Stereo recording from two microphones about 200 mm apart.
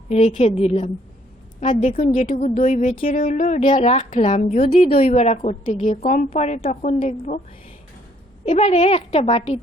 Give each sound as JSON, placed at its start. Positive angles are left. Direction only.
{"t": 0.1, "sound": "a woman's voice", "side_deg": 35}
{"t": 8.4, "sound": "a woman's voice", "side_deg": 30}